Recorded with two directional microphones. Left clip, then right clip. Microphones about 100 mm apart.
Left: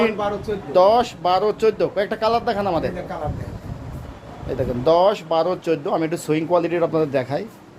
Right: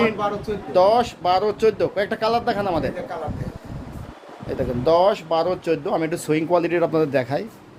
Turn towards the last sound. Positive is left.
turn(degrees=-25)  # may be behind; listen again after turning